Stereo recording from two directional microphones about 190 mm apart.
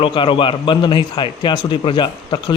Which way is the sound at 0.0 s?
25° left (ahead or behind).